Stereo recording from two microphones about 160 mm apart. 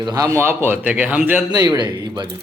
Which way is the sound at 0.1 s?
20° right (ahead or behind).